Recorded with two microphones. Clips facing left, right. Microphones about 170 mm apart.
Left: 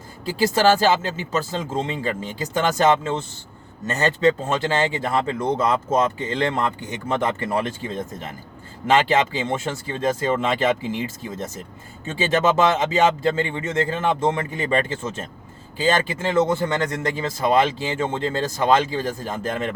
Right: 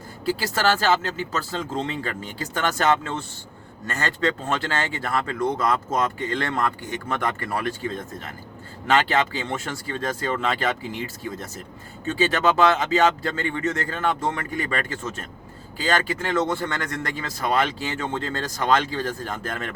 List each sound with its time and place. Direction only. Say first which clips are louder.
0.3 s speech: left 5 dB; 20° left (ahead or behind)